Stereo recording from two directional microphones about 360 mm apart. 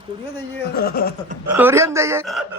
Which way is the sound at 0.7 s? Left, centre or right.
Left.